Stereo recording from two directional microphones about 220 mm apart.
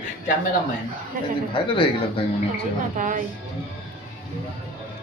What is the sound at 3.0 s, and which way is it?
Speech, 35° right (ahead or behind).